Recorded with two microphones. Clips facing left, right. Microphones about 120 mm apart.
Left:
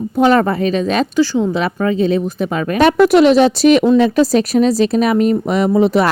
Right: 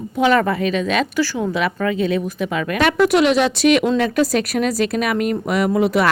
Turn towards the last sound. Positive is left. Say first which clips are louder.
# left 4 dB
turn(degrees=30)  # may be behind; listen again after turning